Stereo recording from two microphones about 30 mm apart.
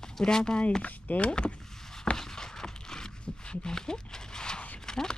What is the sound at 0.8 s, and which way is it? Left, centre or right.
Speech, left.